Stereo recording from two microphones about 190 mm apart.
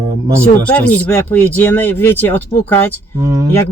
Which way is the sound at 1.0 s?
10° left (ahead or behind).